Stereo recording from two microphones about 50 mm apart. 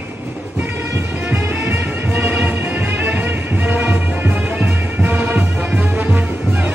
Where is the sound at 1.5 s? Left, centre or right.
Right.